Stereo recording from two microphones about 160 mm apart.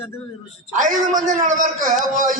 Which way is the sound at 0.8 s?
55° right (ahead or behind).